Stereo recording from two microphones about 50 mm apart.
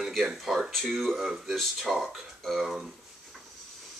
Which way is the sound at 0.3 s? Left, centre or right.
Centre.